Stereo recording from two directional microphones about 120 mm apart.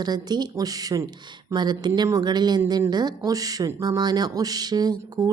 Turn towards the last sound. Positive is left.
turn(degrees=-30)  # may be behind; listen again after turning